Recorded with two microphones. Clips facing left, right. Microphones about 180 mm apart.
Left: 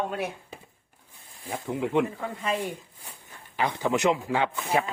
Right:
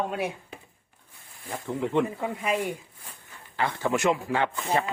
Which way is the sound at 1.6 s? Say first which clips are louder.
Even; 15° left (ahead or behind).